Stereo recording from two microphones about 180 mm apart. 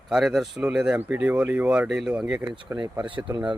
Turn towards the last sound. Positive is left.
turn(degrees=-25)  # may be behind; listen again after turning